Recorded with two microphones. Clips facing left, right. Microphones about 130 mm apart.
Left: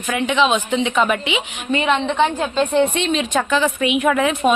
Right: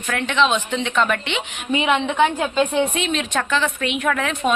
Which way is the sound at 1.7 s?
10° right (ahead or behind).